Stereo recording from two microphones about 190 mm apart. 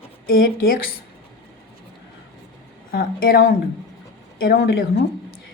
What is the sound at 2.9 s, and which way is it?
Speech, 50° left (ahead or behind).